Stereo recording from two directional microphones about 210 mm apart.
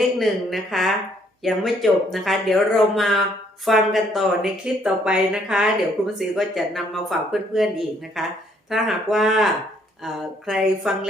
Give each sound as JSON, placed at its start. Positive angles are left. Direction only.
{"t": 0.2, "sound": "speech", "side_deg": 0}